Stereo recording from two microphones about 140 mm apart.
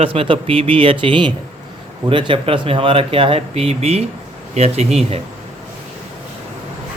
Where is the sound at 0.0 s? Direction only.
40° right (ahead or behind).